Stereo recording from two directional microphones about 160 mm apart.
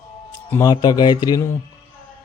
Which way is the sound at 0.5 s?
25° left (ahead or behind).